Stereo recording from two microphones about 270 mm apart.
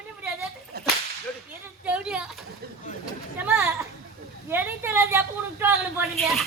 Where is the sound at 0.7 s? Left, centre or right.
Right.